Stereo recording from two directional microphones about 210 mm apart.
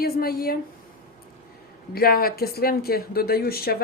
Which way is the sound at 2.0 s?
45° left (ahead or behind).